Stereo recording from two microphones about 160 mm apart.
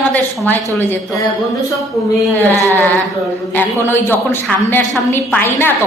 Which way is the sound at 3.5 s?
15° left (ahead or behind).